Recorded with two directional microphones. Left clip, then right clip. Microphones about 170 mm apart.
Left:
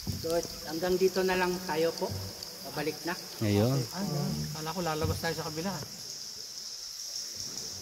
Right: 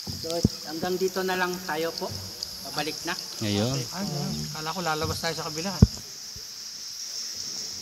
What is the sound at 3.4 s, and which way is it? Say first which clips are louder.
Speech: even; 10° left (ahead or behind).